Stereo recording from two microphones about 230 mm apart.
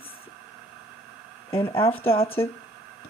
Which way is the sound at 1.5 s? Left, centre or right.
Left.